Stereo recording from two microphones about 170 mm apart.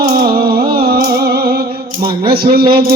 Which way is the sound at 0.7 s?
60° right (ahead or behind).